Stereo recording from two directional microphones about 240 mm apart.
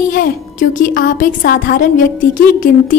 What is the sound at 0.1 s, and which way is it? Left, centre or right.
A woman's voice, left.